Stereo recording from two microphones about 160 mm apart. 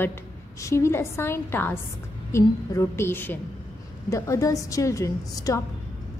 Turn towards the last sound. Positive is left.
turn(degrees=20)  # may be behind; listen again after turning